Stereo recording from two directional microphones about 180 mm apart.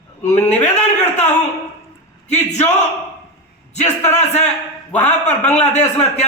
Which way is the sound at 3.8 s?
40° left (ahead or behind).